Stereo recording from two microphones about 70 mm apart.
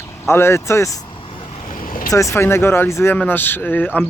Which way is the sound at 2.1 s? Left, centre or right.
Left.